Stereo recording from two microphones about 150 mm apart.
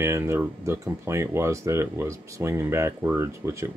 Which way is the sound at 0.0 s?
15° right (ahead or behind).